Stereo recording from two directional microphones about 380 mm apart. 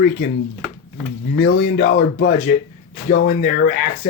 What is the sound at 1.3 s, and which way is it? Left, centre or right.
Speech, left.